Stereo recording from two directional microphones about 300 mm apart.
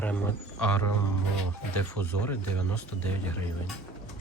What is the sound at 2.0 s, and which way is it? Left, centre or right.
Speech, centre.